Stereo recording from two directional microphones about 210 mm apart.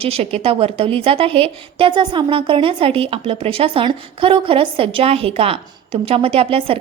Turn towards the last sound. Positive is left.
turn(degrees=-25)  # may be behind; listen again after turning